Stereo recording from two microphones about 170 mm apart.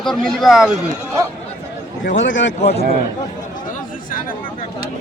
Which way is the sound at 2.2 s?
90° left.